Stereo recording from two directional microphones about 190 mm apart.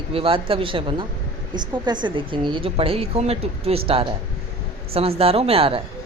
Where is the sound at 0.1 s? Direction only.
30° right (ahead or behind).